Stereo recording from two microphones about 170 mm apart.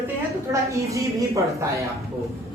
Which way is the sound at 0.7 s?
20° right (ahead or behind).